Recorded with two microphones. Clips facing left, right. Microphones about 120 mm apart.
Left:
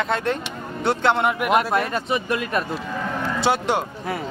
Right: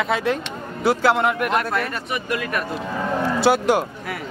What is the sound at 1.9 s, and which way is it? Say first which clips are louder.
Speech: left 3 dB; 25° left (ahead or behind).